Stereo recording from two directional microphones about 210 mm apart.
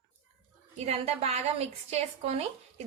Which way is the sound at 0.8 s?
30° right (ahead or behind).